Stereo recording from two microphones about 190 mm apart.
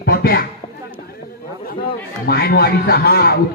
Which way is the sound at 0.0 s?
55° left (ahead or behind).